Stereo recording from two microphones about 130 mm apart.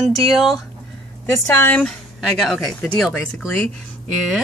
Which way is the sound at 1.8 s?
Centre (ahead or behind).